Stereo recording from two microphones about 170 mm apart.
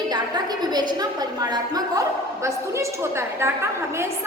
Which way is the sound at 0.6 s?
25° right (ahead or behind).